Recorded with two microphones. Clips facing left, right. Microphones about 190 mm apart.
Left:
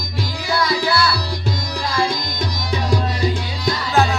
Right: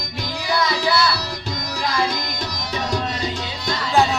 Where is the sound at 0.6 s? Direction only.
20° right (ahead or behind).